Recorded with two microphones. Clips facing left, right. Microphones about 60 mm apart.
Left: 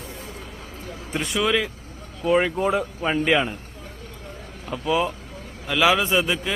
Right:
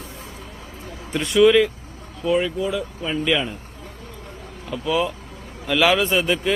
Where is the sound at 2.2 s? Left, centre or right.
Left.